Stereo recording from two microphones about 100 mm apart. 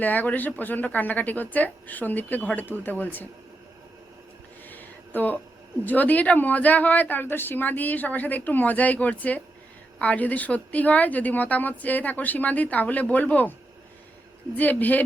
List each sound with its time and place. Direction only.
0.0 s a woman's voice: 15° left (ahead or behind)
4.7 s a sound: 20° left (ahead or behind)
5.8 s a woman's voice: 15° left (ahead or behind)
14.5 s a woman's voice: 15° left (ahead or behind)